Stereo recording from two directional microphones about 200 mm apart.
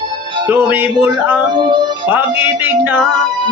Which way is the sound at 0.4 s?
10° right (ahead or behind).